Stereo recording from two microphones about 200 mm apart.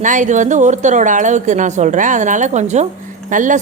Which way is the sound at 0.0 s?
40° right (ahead or behind).